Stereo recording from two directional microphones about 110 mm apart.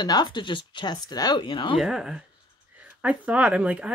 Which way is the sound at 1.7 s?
5° right (ahead or behind).